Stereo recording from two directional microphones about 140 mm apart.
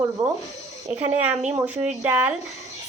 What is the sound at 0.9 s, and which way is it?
Speech, 10° right (ahead or behind).